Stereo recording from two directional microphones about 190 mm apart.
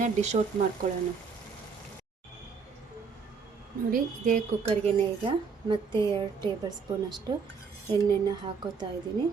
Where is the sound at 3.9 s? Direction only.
45° right (ahead or behind).